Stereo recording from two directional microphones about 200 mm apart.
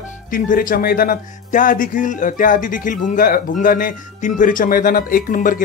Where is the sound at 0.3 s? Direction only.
40° left (ahead or behind).